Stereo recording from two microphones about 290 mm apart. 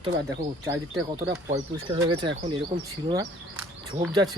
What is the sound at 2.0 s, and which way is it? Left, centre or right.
Speech, centre.